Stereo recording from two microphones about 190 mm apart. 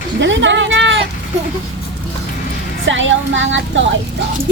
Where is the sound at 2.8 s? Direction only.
80° right.